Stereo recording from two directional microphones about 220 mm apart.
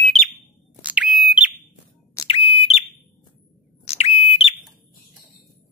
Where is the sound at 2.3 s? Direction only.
25° left (ahead or behind).